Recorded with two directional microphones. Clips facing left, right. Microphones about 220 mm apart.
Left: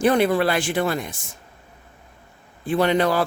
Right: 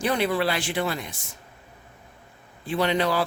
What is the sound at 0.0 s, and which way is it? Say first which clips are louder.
Speech: left 6 dB; 50° left (ahead or behind).